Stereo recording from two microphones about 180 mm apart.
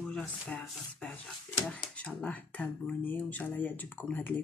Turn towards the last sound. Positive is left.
turn(degrees=10)  # may be behind; listen again after turning